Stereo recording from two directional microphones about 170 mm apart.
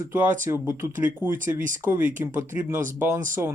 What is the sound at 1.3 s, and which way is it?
Speech, 50° right (ahead or behind).